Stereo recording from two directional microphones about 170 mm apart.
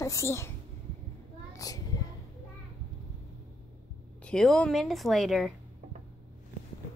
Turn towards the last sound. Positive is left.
turn(degrees=0)  # may be behind; listen again after turning